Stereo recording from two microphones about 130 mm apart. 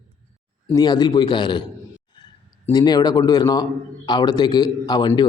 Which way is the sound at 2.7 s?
30° left (ahead or behind).